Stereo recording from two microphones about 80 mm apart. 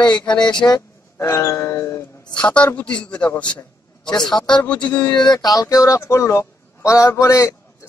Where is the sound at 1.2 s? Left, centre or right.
Left.